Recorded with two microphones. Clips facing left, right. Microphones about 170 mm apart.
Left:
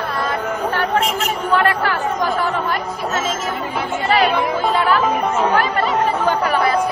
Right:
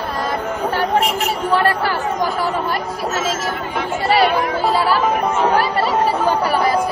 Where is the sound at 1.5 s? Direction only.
35° right (ahead or behind).